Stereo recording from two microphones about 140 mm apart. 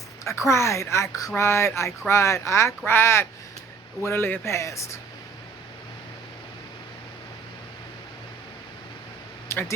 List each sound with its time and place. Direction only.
0.3 s speech: 20° left (ahead or behind)
9.5 s speech: 20° left (ahead or behind)